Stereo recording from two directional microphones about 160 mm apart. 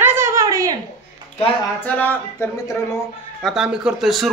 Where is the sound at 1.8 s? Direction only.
10° left (ahead or behind).